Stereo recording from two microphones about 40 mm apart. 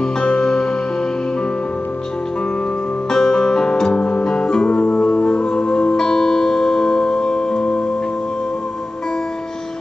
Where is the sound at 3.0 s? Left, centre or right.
Centre.